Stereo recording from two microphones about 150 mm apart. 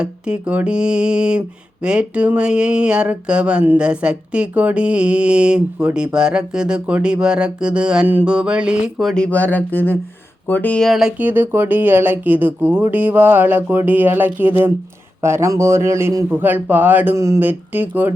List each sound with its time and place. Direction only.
0.0 s mantra: 5° right (ahead or behind)